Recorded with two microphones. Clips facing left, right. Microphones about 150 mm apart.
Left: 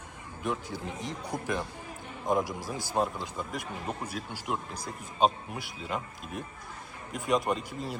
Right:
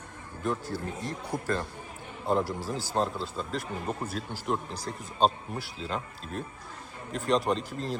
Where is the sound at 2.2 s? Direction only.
15° left (ahead or behind).